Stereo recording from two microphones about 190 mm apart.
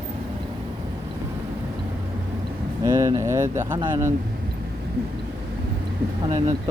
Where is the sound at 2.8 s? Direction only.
15° right (ahead or behind).